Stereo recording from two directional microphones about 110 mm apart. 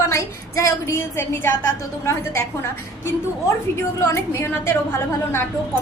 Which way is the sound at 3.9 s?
25° left (ahead or behind).